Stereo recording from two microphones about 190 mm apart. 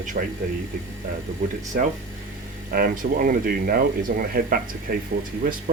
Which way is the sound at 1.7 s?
50° right (ahead or behind).